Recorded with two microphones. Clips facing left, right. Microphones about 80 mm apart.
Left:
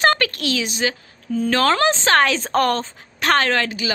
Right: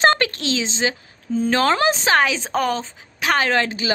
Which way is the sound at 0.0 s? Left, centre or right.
Right.